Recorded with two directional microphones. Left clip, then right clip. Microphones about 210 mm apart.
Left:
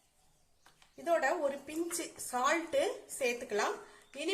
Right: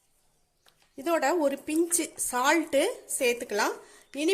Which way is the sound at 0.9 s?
45° right (ahead or behind).